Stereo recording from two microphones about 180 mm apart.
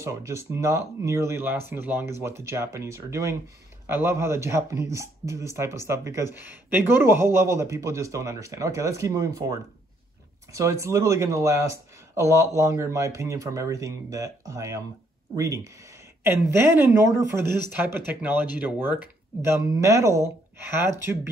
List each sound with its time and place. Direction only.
0.0 s speech: 15° right (ahead or behind)
10.5 s speech: 15° right (ahead or behind)